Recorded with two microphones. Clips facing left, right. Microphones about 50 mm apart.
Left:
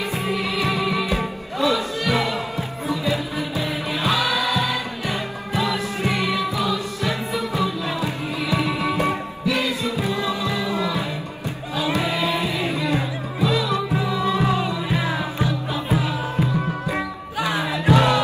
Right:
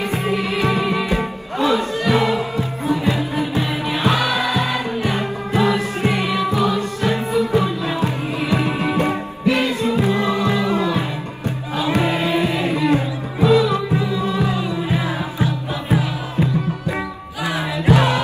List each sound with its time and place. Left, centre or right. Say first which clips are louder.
0.1 s music: right 3 dB; right
14.2 s music: even; left
15.4 s music: right 1 dB; right
17.6 s music: right 2 dB; right